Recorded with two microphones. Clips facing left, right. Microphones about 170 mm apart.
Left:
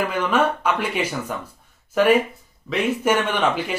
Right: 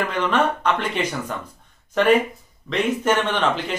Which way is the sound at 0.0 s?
10° left (ahead or behind).